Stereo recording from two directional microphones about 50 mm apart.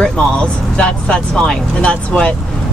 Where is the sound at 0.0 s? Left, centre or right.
Centre.